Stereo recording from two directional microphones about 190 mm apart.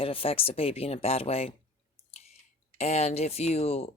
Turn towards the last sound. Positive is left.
turn(degrees=35)  # may be behind; listen again after turning